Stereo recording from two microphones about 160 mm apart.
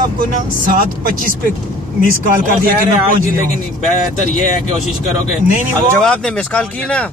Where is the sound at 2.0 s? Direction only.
60° right (ahead or behind).